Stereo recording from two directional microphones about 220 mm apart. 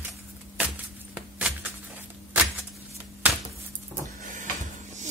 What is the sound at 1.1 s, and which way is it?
Music, 5° right (ahead or behind).